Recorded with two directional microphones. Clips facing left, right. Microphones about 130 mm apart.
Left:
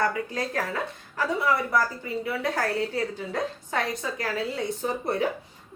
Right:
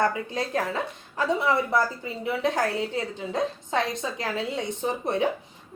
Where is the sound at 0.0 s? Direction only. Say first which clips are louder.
Right 1 dB; 20° right (ahead or behind).